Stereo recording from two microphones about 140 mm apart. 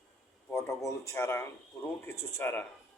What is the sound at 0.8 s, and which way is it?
A man's voice, 20° left (ahead or behind).